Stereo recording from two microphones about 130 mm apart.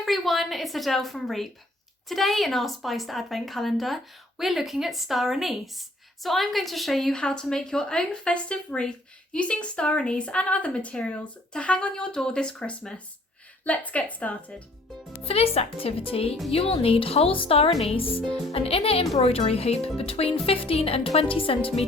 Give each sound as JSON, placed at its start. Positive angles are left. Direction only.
{"t": 0.0, "sound": "a woman's voice", "side_deg": 0}
{"t": 15.2, "sound": "speech", "side_deg": 50}